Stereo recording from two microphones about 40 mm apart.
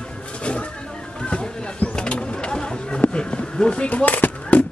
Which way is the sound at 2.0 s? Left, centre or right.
Left.